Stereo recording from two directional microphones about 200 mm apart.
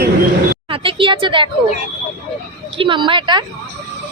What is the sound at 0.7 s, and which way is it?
Speech, 25° right (ahead or behind).